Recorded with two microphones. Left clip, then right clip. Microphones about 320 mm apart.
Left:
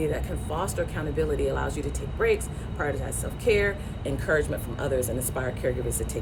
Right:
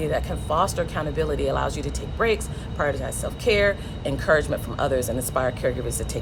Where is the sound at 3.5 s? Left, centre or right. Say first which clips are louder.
Right 3 dB; centre.